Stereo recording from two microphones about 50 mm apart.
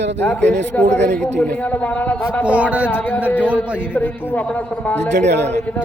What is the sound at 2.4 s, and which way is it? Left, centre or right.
Speech, right.